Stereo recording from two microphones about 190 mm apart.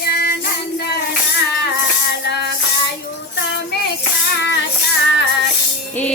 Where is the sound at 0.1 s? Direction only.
55° left (ahead or behind).